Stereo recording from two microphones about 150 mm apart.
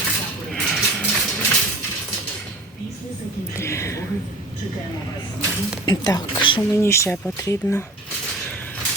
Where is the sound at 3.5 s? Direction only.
20° left (ahead or behind).